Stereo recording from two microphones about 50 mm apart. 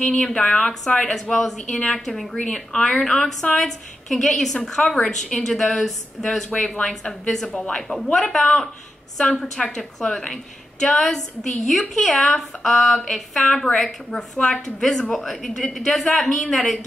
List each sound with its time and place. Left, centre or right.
0.2 s a woman's voice: centre
7.4 s speech: left
7.7 s a woman's voice: centre